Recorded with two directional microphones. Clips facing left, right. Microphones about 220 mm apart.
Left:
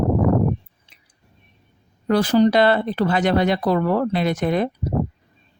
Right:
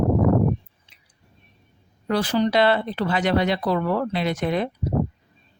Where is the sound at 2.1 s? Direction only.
45° left (ahead or behind).